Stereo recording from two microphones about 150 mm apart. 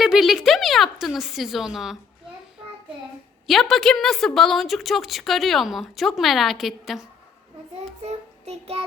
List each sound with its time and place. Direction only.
0.0 s a woman's voice: centre (ahead or behind)
3.4 s a woman's voice: centre (ahead or behind)
8.0 s child singing: 45° right (ahead or behind)